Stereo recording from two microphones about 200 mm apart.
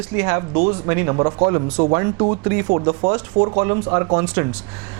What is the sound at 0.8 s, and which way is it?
Speech, 20° right (ahead or behind).